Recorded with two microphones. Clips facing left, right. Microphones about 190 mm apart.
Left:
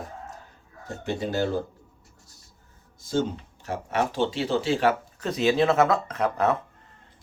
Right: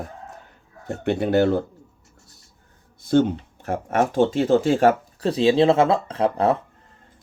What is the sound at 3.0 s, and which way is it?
Speech, 65° right (ahead or behind).